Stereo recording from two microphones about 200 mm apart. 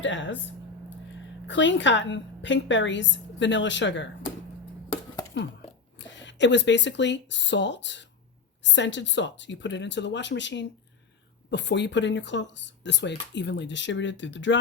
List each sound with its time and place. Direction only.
0.0 s a sound: 70° left (ahead or behind)
1.5 s speech: 65° left (ahead or behind)
6.0 s speech: 65° left (ahead or behind)